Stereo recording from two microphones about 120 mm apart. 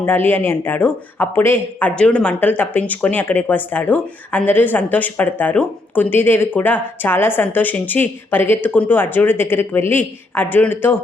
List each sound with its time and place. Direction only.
0.0 s speech: 15° left (ahead or behind)